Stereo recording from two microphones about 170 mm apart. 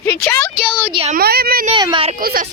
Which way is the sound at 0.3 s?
15° left (ahead or behind).